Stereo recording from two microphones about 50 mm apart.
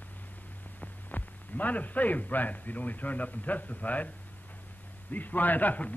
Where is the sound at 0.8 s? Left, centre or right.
Left.